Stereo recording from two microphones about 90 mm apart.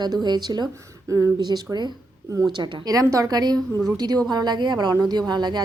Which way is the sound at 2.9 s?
40° right (ahead or behind).